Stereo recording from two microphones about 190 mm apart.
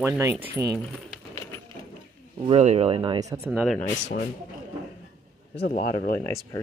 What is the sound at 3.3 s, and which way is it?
Speech, 15° right (ahead or behind).